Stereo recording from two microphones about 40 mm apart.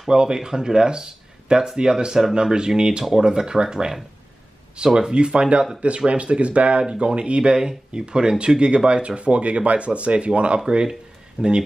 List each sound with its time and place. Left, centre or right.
0.1 s speech: centre
10.6 s speech: centre
11.4 s speech: right